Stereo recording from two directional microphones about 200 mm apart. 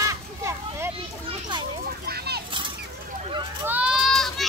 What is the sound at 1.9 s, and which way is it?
Speech, 50° right (ahead or behind).